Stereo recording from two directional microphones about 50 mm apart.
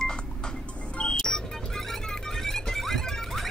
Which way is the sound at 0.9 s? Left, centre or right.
Centre.